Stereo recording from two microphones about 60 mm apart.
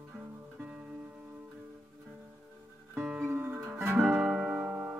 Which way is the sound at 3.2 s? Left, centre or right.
Right.